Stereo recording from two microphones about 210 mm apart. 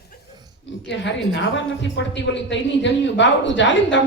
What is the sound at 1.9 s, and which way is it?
A woman's voice, 60° left (ahead or behind).